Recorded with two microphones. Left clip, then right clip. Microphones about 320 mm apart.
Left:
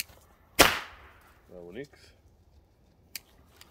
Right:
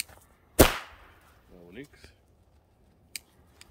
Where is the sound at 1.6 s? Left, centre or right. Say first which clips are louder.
Left 2 dB; left.